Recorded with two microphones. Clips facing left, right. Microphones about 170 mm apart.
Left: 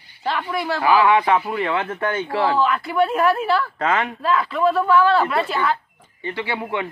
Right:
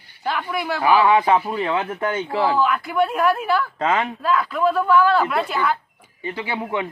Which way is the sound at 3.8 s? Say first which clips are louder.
Even; 20° right (ahead or behind).